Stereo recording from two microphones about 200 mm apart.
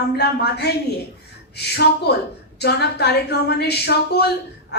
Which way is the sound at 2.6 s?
55° left (ahead or behind).